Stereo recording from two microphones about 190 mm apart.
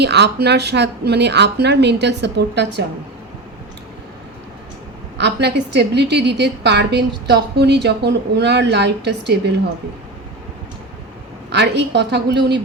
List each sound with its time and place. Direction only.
0.0 s a woman's voice: 60° right (ahead or behind)
5.1 s a woman's voice: 60° right (ahead or behind)
11.5 s a woman's voice: 65° right (ahead or behind)